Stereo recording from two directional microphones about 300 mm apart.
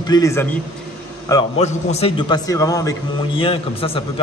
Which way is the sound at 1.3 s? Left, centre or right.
Left.